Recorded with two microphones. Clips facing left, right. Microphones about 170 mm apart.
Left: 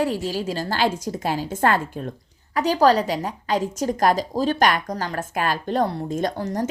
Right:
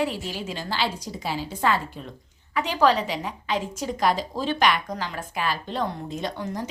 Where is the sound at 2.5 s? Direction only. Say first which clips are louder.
Left 4 dB; 40° left (ahead or behind).